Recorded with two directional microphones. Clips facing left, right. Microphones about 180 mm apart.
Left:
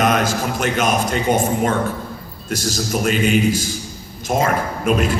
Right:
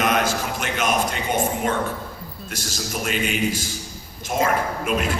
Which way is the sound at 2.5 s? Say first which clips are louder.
Left 9 dB; 40° left (ahead or behind).